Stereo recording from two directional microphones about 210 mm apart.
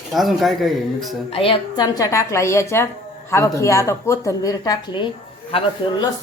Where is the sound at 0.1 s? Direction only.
Centre (ahead or behind).